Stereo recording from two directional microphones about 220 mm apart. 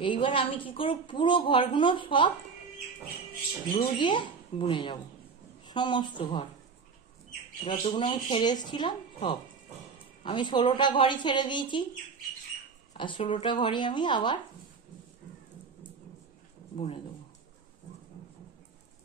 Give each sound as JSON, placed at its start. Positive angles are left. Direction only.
{"t": 0.0, "sound": "a woman's voice", "side_deg": 20}
{"t": 3.7, "sound": "a woman's voice", "side_deg": 20}
{"t": 7.6, "sound": "a woman's voice", "side_deg": 25}
{"t": 12.9, "sound": "a woman's voice", "side_deg": 20}
{"t": 16.7, "sound": "a woman's voice", "side_deg": 25}